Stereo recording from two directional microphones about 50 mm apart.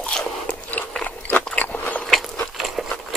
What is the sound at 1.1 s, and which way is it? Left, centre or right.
Biting, left.